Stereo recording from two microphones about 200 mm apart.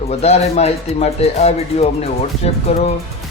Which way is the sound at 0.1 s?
30° left (ahead or behind).